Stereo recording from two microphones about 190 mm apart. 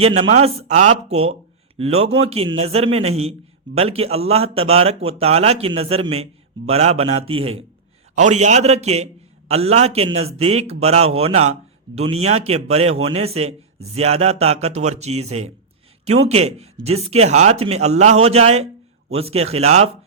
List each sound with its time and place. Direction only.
0.0 s a man's voice: 30° right (ahead or behind)